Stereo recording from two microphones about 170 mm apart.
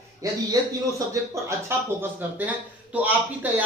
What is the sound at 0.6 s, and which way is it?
Speech, 20° right (ahead or behind).